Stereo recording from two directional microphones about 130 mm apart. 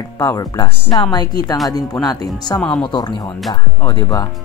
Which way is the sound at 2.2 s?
30° left (ahead or behind).